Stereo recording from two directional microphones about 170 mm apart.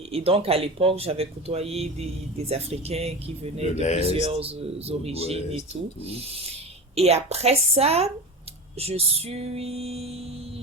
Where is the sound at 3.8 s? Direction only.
40° left (ahead or behind).